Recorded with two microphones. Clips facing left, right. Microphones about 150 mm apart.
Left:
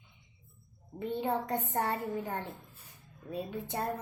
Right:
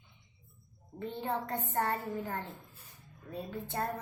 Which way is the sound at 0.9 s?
15° left (ahead or behind).